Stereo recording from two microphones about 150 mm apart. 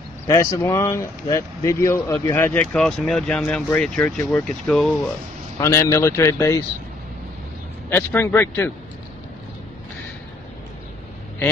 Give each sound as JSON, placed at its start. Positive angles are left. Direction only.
{"t": 0.3, "sound": "speech", "side_deg": 20}
{"t": 7.9, "sound": "speech", "side_deg": 15}